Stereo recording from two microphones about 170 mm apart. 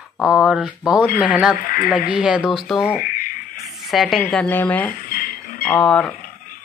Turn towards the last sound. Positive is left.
turn(degrees=5)  # may be behind; listen again after turning